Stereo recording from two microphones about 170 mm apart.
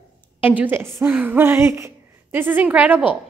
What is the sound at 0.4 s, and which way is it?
A woman's voice, 10° right (ahead or behind).